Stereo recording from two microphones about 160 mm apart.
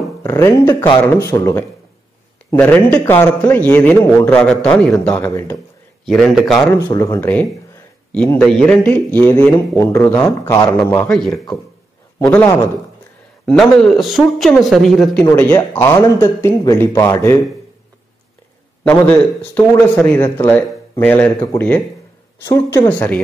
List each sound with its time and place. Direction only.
0.2 s a man's voice: 20° left (ahead or behind)
2.5 s a man's voice: 10° left (ahead or behind)
6.0 s speech: centre (ahead or behind)
6.9 s a man's voice: 20° left (ahead or behind)
13.5 s a man's voice: 5° left (ahead or behind)
18.9 s a man's voice: 10° left (ahead or behind)
22.8 s a man's voice: 10° left (ahead or behind)